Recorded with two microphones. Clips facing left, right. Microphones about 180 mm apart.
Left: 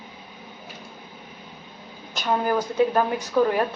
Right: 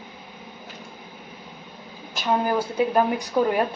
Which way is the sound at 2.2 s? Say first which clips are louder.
Even; 10° right (ahead or behind).